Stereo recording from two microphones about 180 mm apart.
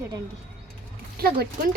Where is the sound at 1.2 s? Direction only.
55° right (ahead or behind).